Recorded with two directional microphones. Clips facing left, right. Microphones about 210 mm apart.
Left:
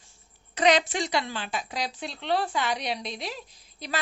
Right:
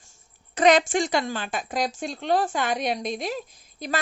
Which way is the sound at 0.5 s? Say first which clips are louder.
Right 4 dB; 50° right (ahead or behind).